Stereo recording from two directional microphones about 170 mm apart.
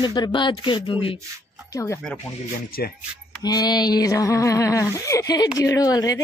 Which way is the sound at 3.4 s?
25° left (ahead or behind).